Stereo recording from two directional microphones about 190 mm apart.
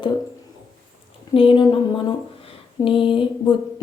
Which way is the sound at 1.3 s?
30° left (ahead or behind).